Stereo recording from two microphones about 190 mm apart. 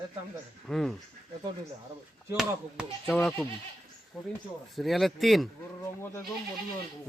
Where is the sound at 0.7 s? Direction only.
Centre (ahead or behind).